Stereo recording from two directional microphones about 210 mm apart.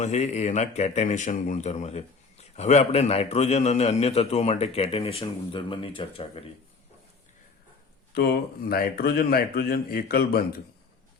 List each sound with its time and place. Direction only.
0.0 s a man's voice: 30° left (ahead or behind)
8.1 s speech: 50° left (ahead or behind)